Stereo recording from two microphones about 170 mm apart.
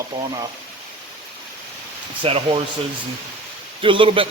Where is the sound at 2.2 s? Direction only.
35° right (ahead or behind).